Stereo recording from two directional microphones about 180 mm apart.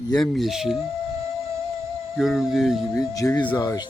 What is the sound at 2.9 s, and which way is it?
Speech, 20° left (ahead or behind).